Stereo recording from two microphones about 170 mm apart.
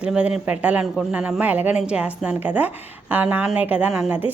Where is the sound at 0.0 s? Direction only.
5° right (ahead or behind).